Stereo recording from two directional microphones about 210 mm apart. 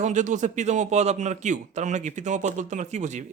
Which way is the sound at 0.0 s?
35° right (ahead or behind).